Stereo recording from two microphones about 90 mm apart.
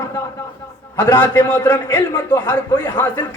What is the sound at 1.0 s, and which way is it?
A man's voice, 20° left (ahead or behind).